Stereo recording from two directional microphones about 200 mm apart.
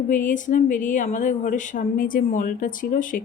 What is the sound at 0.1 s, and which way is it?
Speech, 40° left (ahead or behind).